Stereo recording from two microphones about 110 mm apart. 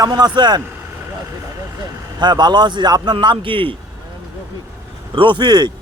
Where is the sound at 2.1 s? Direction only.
40° right (ahead or behind).